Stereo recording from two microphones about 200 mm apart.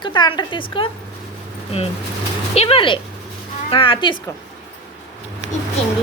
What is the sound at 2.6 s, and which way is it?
A woman's voice, 30° left (ahead or behind).